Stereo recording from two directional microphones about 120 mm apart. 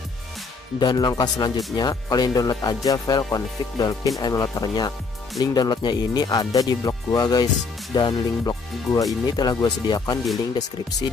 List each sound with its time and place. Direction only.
0.7 s speech: 35° left (ahead or behind)